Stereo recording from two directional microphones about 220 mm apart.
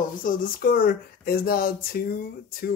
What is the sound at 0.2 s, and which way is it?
Speech, 40° left (ahead or behind).